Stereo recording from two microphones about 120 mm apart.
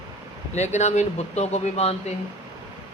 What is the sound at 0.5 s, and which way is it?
Speech, 70° left (ahead or behind).